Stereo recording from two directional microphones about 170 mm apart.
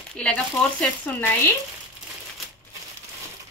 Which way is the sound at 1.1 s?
5° left (ahead or behind).